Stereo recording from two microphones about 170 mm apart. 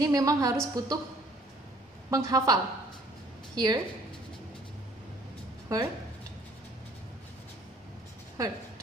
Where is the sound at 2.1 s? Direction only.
20° right (ahead or behind).